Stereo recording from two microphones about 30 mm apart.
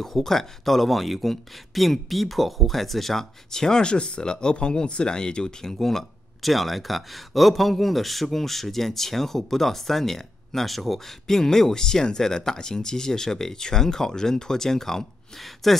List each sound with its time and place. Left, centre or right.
0.0 s speech: centre
3.4 s speech: centre
3.8 s speech: left; by 6.0 s centre
6.4 s a man's voice: centre
15.4 s speech: centre